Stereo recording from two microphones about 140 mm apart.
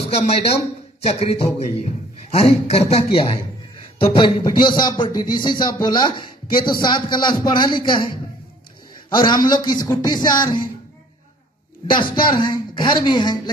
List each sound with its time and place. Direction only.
0.1 s speech: 45° left (ahead or behind)
11.9 s speech: 35° left (ahead or behind)